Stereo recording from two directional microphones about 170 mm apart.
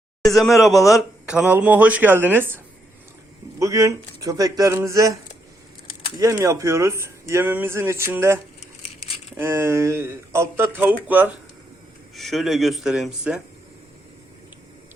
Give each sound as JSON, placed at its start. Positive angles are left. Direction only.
{"t": 0.2, "sound": "speech", "side_deg": 0}
{"t": 3.6, "sound": "speech", "side_deg": -20}
{"t": 6.1, "sound": "speech", "side_deg": -20}
{"t": 12.1, "sound": "speech", "side_deg": 0}